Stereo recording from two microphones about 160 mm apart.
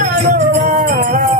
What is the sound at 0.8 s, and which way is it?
Music, 65° right (ahead or behind).